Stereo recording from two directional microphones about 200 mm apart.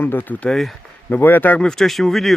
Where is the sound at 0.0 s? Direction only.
10° left (ahead or behind).